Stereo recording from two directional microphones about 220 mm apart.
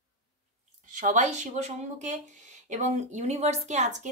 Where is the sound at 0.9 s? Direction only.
35° right (ahead or behind).